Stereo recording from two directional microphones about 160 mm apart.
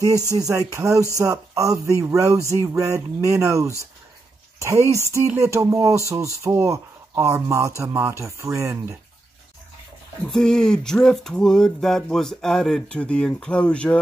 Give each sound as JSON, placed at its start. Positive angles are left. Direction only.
{"t": 0.3, "sound": "speech", "side_deg": -20}
{"t": 10.3, "sound": "speech", "side_deg": 5}